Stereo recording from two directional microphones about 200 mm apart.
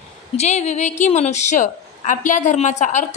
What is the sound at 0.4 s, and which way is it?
A woman's voice, 35° left (ahead or behind).